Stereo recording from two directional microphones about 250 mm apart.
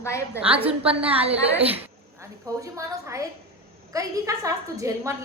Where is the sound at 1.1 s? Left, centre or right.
Right.